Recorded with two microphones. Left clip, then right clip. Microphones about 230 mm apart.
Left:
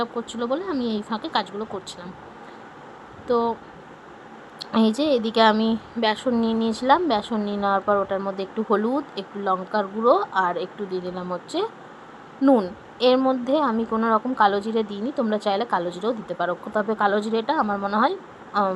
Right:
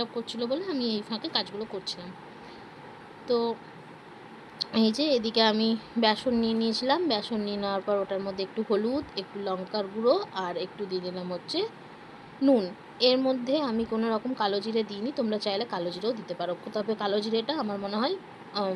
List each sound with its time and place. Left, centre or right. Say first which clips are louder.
0.0 s a woman's voice: left 5 dB; centre
3.2 s a woman's voice: left 5 dB; centre
4.6 s a woman's voice: left 5 dB; centre
12.4 s a woman's voice: left 5 dB; centre